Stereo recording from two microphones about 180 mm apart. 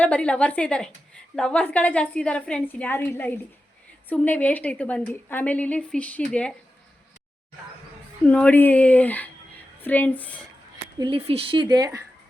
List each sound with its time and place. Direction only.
0.0 s a woman's voice: 5° left (ahead or behind)
8.3 s a woman's voice: 10° left (ahead or behind)
10.9 s speech: 25° right (ahead or behind)